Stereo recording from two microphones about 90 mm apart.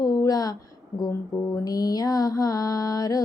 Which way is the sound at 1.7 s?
45° left (ahead or behind).